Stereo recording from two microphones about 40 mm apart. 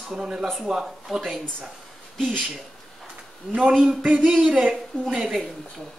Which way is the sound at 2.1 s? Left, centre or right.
Centre.